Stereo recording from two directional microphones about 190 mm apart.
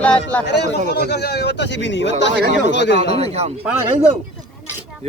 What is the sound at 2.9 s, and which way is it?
Speech, 30° right (ahead or behind).